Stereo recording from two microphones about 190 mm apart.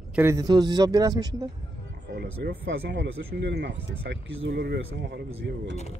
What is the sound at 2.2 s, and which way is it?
Speech, 60° right (ahead or behind).